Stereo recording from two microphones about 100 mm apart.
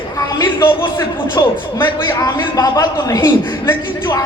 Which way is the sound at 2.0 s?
35° left (ahead or behind).